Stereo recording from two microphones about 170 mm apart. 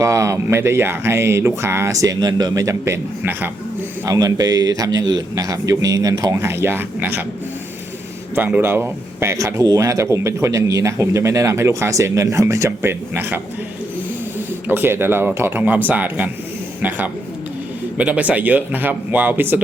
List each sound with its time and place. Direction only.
0.0 s a man's voice: 20° right (ahead or behind)
8.4 s speech: 10° right (ahead or behind)
14.7 s speech: 15° right (ahead or behind)
17.9 s speech: 10° right (ahead or behind)